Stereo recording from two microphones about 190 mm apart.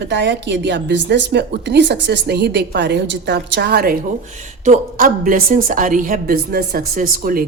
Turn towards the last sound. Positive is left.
turn(degrees=-50)  # may be behind; listen again after turning